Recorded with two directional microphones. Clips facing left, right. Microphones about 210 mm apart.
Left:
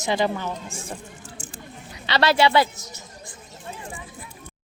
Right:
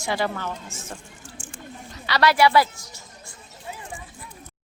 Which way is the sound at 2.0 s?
25° left (ahead or behind).